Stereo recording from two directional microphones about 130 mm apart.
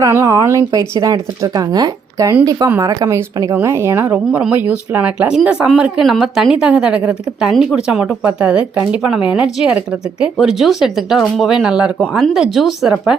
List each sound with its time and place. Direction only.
0.0 s speech: 25° right (ahead or behind); by 13.1 s 5° right (ahead or behind)